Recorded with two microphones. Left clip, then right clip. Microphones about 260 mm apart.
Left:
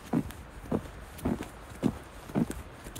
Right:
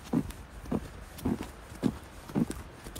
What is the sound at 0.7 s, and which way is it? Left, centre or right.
Wind, centre.